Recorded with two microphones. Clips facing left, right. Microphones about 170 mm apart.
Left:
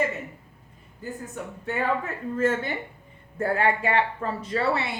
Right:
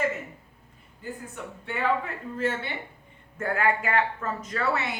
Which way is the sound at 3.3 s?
35° left (ahead or behind).